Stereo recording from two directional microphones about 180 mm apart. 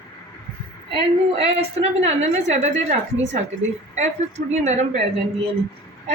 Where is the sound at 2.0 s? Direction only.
35° right (ahead or behind).